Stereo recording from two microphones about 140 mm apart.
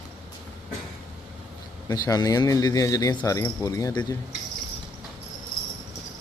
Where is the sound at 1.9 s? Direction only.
25° left (ahead or behind).